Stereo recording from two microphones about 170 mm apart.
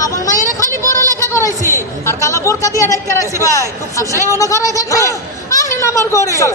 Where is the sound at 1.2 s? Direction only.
20° left (ahead or behind).